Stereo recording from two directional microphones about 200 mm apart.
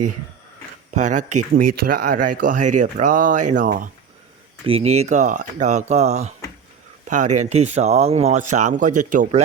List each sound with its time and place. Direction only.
0.9 s speech: 40° right (ahead or behind)
4.6 s speech: 30° right (ahead or behind)